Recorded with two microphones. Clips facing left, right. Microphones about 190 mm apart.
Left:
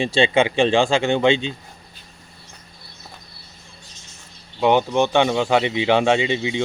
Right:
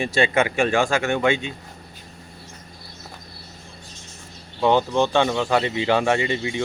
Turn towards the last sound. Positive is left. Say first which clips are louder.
# left 2 dB
turn(degrees=20)  # may be behind; listen again after turning